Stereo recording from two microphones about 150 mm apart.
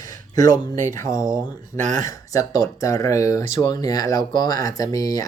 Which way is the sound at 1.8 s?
55° right (ahead or behind).